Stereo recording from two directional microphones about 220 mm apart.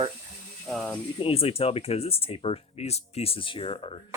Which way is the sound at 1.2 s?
25° left (ahead or behind).